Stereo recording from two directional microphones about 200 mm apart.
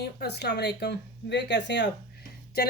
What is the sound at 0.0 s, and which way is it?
Speech, 55° left (ahead or behind).